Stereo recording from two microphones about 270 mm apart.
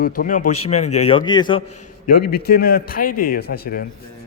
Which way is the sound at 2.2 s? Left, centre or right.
Left.